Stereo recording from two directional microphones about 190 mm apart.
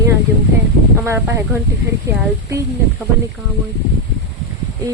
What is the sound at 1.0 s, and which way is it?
Speech, 15° right (ahead or behind).